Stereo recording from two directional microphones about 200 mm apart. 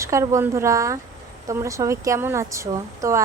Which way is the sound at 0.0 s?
15° right (ahead or behind).